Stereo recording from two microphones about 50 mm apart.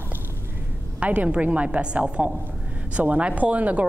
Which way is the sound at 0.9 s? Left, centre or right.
Right.